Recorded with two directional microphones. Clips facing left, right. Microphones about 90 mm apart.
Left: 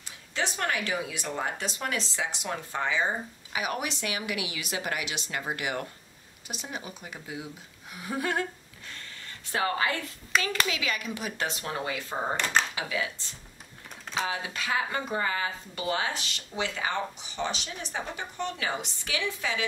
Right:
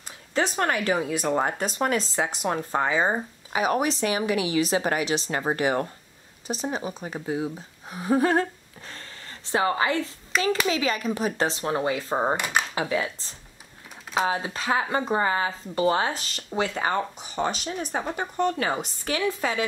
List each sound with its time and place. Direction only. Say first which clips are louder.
0.3 s speech: right 6 dB; 40° right (ahead or behind)
9.5 s a woman's voice: right 5 dB; 25° right (ahead or behind)
10.3 s speech: right 4 dB; centre (ahead or behind)
10.7 s speech: right 7 dB; 35° right (ahead or behind)